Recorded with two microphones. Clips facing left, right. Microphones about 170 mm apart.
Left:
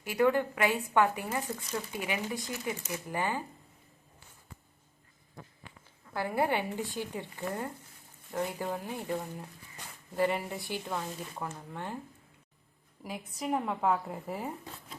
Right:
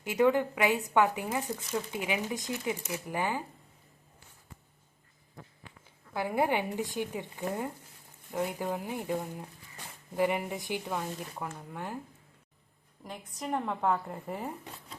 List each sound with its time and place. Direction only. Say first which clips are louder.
0.0 s a woman's voice: right 1 dB; 20° right (ahead or behind)
6.1 s a woman's voice: right 1 dB; 15° right (ahead or behind)
13.1 s a woman's voice: left 2 dB; 5° left (ahead or behind)